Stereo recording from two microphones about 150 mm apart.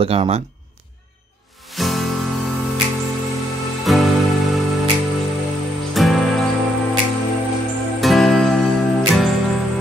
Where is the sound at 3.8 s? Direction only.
Centre (ahead or behind).